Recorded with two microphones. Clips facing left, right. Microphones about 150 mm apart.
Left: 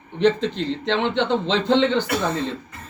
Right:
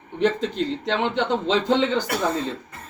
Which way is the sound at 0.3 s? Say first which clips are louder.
Even; 40° right (ahead or behind).